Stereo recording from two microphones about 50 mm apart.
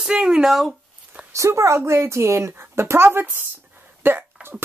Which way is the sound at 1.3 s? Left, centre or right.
Right.